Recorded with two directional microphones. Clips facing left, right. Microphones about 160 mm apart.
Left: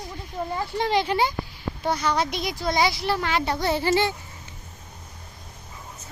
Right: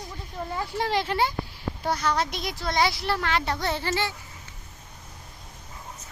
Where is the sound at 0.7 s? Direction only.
Centre (ahead or behind); by 4.1 s 15° left (ahead or behind).